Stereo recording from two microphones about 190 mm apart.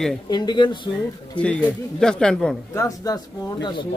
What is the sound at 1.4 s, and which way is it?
Speech, 5° left (ahead or behind).